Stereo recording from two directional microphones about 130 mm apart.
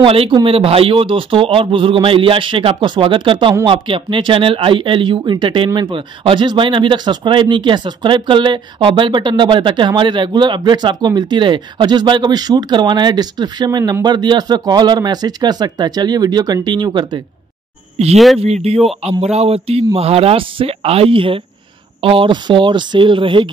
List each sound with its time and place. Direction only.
0.0 s speech: 45° right (ahead or behind)
18.1 s speech: centre (ahead or behind)
18.4 s speech: 50° right (ahead or behind)